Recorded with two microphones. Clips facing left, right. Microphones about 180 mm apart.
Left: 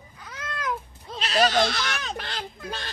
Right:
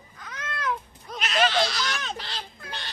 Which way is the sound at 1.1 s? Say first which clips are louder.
Left 2 dB; 35° left (ahead or behind).